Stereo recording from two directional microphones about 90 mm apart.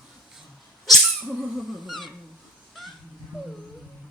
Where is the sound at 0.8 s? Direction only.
Centre (ahead or behind).